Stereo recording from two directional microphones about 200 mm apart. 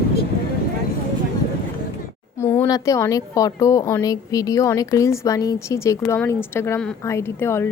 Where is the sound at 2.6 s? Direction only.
15° left (ahead or behind).